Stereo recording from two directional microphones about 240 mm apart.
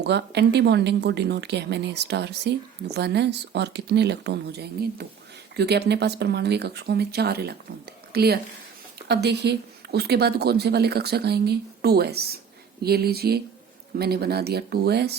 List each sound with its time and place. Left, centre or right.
0.0 s speech: right